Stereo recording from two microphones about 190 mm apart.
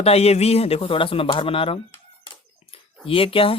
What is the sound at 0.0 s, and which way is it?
Speech, 30° left (ahead or behind).